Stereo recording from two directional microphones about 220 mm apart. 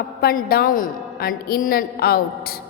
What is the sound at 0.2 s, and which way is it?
A woman's voice, 45° left (ahead or behind).